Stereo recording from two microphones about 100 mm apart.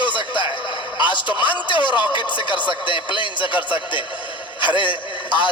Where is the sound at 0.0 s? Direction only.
50° left (ahead or behind).